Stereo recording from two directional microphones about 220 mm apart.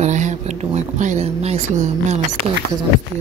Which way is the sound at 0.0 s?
30° right (ahead or behind).